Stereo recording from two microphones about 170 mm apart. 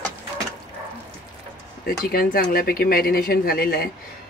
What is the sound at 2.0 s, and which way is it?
Speech, 60° left (ahead or behind).